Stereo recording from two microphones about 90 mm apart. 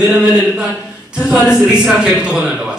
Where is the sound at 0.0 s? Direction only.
5° right (ahead or behind).